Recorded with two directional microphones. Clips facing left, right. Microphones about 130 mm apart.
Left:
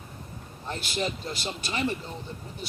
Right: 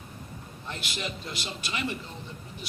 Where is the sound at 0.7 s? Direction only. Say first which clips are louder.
Left 5 dB; 35° left (ahead or behind).